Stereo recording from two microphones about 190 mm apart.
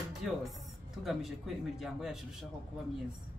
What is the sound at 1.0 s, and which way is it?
Speech, centre (ahead or behind).